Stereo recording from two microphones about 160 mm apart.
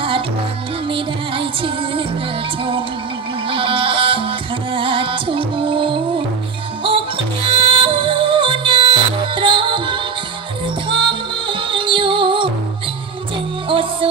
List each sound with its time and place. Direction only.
0.9 s music: 35° right (ahead or behind)
3.4 s music: 35° right (ahead or behind)
7.4 s music: 35° right (ahead or behind)
13.7 s music: 35° right (ahead or behind)